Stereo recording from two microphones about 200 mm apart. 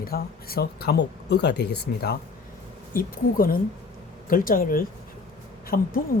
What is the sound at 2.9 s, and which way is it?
Speech, 45° left (ahead or behind).